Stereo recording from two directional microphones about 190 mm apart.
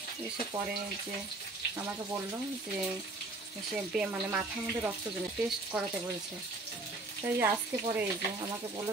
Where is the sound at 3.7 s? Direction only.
5° right (ahead or behind).